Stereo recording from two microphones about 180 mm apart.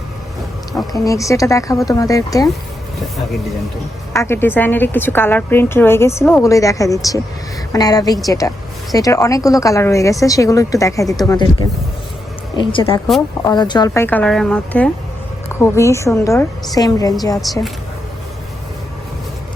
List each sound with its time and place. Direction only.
0.7 s speech: centre (ahead or behind)
1.0 s a woman's voice: 15° left (ahead or behind)
4.1 s a woman's voice: 15° left (ahead or behind)
12.5 s a woman's voice: 30° left (ahead or behind)
17.4 s speech: centre (ahead or behind)